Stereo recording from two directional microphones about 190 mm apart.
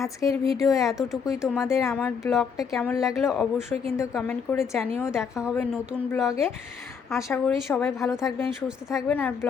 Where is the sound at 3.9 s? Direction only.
10° left (ahead or behind).